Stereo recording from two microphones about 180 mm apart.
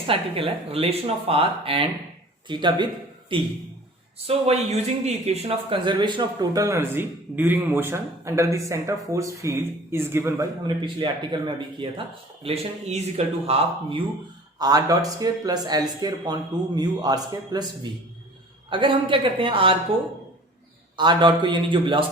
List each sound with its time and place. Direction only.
0.1 s a man's voice: 30° right (ahead or behind); by 10.4 s 15° right (ahead or behind)
10.8 s a man's voice: 25° right (ahead or behind)
14.6 s a man's voice: 20° right (ahead or behind)
18.7 s a man's voice: 30° right (ahead or behind)
20.9 s a man's voice: 25° right (ahead or behind)